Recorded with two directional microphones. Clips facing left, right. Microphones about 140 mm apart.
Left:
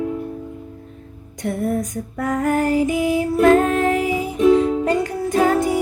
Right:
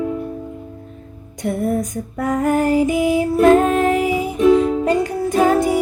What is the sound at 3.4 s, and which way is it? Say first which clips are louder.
Music: right 2 dB; 20° right (ahead or behind).